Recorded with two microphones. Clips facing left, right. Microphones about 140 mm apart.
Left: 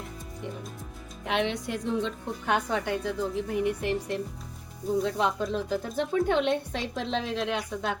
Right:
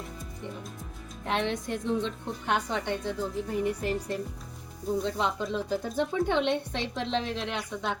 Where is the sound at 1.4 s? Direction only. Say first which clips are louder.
Left 3 dB; 15° left (ahead or behind).